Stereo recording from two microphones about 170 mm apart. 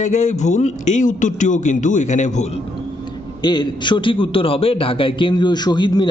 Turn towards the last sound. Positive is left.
turn(degrees=25)  # may be behind; listen again after turning